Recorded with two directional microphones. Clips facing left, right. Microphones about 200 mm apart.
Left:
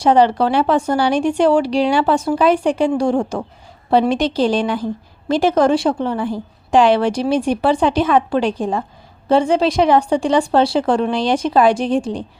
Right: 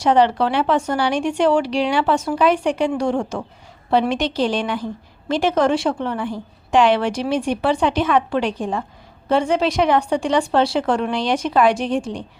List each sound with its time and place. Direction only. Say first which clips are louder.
0.0 s a woman's voice: left 3 dB; 35° left (ahead or behind)